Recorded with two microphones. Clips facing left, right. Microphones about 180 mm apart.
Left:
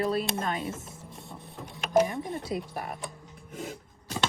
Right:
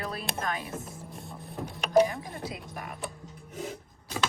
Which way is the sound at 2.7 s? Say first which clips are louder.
Left 2 dB; 35° left (ahead or behind).